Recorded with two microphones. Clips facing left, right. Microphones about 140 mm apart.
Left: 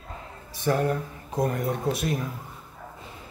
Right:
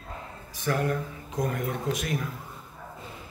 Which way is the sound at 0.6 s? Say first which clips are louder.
Left 3 dB; 30° left (ahead or behind).